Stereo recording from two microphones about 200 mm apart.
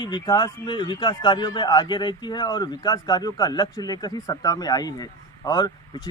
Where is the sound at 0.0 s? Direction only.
20° left (ahead or behind).